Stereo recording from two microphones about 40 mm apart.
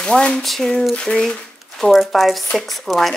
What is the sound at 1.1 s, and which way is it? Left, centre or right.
Speech, left.